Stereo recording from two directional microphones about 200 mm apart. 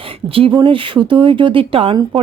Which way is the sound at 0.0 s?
25° right (ahead or behind).